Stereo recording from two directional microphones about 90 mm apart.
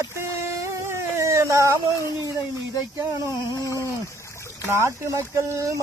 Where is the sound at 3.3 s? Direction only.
35° left (ahead or behind).